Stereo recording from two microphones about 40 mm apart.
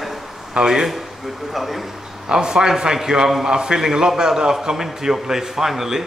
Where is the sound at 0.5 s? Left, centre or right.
Centre.